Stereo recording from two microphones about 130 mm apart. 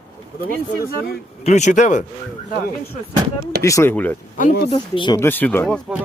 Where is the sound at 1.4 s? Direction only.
60° left (ahead or behind).